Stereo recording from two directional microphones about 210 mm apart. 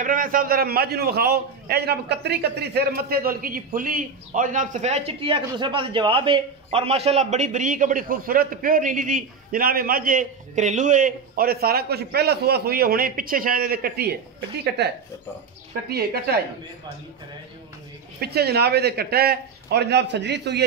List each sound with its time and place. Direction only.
0.0 s a man's voice: 40° right (ahead or behind)
18.2 s a man's voice: 50° right (ahead or behind)